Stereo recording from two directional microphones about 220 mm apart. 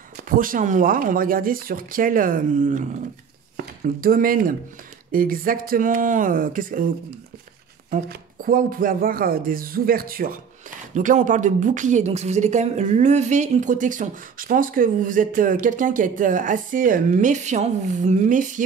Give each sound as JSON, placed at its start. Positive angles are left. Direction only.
{"t": 0.4, "sound": "speech", "side_deg": -35}
{"t": 7.9, "sound": "speech", "side_deg": -40}